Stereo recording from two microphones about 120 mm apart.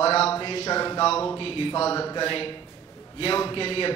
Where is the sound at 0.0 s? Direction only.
55° left (ahead or behind).